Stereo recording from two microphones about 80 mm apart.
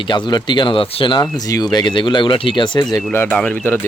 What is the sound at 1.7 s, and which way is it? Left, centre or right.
Speech, left.